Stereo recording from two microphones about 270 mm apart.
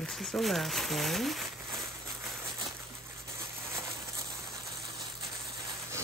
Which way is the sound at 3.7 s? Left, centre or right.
Centre.